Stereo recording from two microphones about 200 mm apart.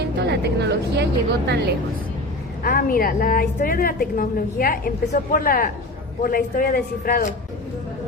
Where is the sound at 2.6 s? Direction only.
45° left (ahead or behind).